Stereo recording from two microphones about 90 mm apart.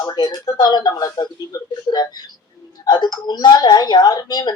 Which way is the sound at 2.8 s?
50° left (ahead or behind).